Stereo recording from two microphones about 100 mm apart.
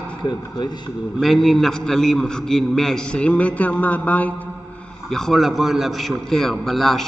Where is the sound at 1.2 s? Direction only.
Centre (ahead or behind).